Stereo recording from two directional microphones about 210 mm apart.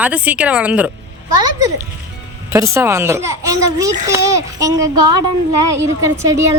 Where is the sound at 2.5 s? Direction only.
10° right (ahead or behind).